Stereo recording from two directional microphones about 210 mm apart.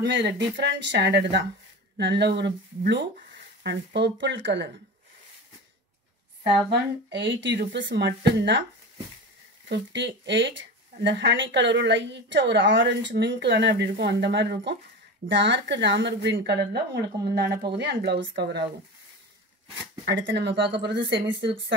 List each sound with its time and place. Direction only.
0.0 s a woman's voice: 55° right (ahead or behind)
6.7 s a woman's voice: 55° right (ahead or behind)
9.7 s a woman's voice: 55° right (ahead or behind)
20.1 s a woman's voice: 60° right (ahead or behind)